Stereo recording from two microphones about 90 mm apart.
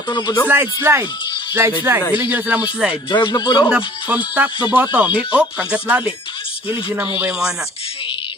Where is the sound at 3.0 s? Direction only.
60° left (ahead or behind).